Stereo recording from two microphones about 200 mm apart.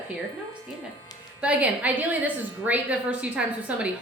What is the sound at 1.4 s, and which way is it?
A woman's voice, 5° right (ahead or behind).